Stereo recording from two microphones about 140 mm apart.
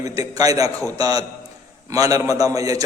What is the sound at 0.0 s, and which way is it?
A man's voice, 25° right (ahead or behind).